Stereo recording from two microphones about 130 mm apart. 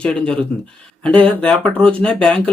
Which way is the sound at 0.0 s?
10° left (ahead or behind).